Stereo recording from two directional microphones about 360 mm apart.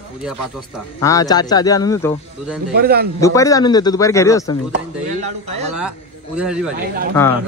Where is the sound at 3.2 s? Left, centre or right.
Centre.